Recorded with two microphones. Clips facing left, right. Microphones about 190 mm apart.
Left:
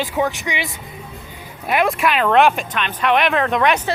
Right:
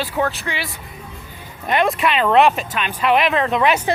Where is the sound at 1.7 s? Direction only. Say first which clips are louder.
Even; 5° left (ahead or behind).